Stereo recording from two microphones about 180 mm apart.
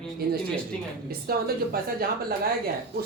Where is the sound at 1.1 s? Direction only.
60° right (ahead or behind).